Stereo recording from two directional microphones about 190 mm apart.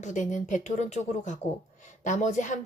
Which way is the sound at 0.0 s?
40° left (ahead or behind).